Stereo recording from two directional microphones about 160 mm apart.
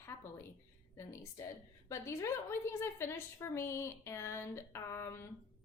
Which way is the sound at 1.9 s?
20° left (ahead or behind).